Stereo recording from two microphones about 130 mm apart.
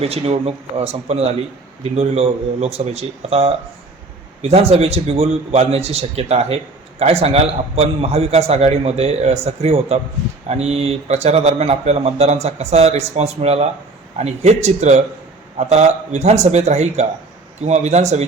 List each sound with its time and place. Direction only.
0.0 s a man's voice: 50° right (ahead or behind)